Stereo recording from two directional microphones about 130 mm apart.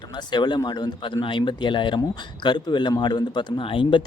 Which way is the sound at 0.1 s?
35° left (ahead or behind).